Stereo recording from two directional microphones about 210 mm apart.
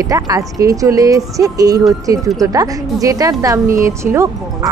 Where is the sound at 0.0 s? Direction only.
15° right (ahead or behind).